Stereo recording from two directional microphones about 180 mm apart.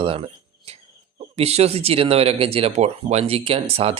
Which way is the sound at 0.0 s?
30° right (ahead or behind).